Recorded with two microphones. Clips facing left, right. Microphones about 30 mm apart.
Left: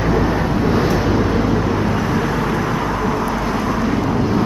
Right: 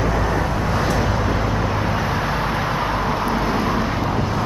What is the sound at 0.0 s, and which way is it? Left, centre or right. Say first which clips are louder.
Vehicle: left 3 dB; centre.